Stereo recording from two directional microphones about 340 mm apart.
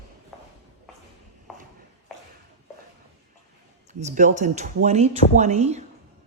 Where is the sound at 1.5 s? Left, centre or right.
Centre.